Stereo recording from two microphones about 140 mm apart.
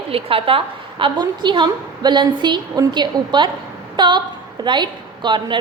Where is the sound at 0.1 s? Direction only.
40° right (ahead or behind).